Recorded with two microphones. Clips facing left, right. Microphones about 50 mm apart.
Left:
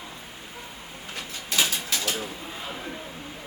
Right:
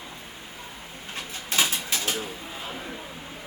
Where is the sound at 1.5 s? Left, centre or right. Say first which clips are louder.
Even; right.